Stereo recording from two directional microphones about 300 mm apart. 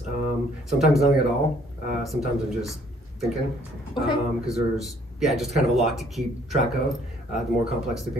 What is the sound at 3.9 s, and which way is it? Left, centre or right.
Speech, centre.